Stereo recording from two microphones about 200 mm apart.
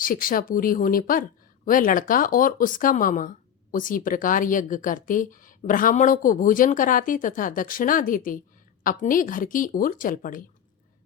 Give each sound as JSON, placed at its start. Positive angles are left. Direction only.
{"t": 0.0, "sound": "speech", "side_deg": 45}